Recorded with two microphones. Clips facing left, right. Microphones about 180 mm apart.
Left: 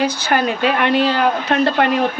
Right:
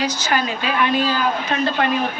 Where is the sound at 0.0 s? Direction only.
55° left (ahead or behind).